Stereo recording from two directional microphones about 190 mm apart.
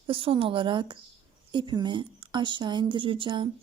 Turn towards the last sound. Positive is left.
turn(degrees=-25)  # may be behind; listen again after turning